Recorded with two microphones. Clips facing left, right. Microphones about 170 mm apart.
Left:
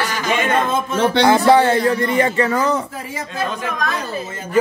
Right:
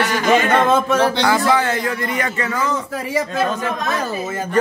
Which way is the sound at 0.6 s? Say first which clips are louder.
Right 4 dB; 75° right (ahead or behind).